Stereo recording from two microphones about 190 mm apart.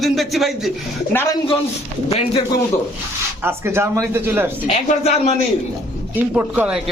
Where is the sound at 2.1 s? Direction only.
30° left (ahead or behind).